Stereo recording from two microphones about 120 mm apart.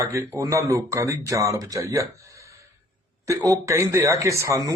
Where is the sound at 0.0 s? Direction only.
25° right (ahead or behind).